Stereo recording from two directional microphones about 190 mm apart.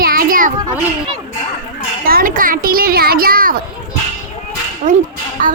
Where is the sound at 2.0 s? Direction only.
50° right (ahead or behind).